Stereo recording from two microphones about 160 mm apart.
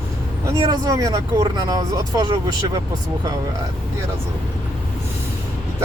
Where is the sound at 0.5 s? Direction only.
25° right (ahead or behind).